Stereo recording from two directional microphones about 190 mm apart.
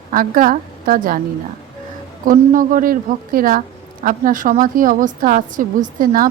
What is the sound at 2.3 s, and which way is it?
A woman's voice, 45° right (ahead or behind).